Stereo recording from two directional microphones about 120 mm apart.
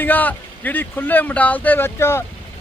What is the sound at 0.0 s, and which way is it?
Speech, 15° left (ahead or behind).